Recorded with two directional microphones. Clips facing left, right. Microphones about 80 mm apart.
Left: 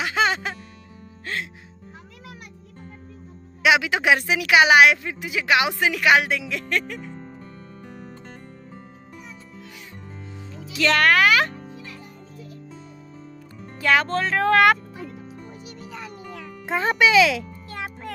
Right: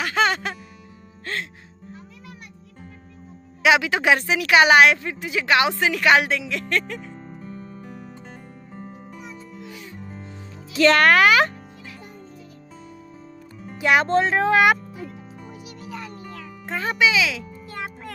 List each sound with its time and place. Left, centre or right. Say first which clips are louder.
0.0 s music: right 1 dB; centre
3.6 s a woman's voice: right 1 dB; centre
7.4 s music: right 4 dB; centre
9.6 s music: right 4 dB; centre
10.7 s music: right 3 dB; right
13.7 s music: right 2 dB; centre
16.8 s speech: left 4 dB; left
17.6 s music: even; centre